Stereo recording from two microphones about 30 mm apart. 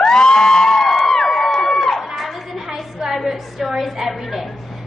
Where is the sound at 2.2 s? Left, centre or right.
Centre.